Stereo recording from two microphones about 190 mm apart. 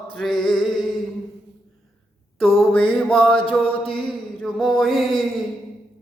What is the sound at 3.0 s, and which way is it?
Music, centre (ahead or behind).